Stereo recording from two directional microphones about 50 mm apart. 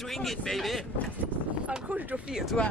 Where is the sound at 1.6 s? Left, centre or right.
Right.